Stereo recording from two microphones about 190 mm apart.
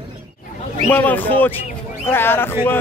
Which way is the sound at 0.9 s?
10° left (ahead or behind).